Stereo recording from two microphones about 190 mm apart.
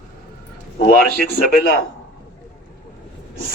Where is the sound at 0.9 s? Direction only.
50° left (ahead or behind).